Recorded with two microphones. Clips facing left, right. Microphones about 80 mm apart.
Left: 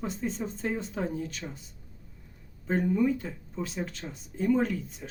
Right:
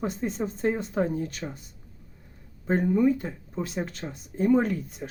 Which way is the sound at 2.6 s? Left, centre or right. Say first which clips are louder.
Right 4 dB; right.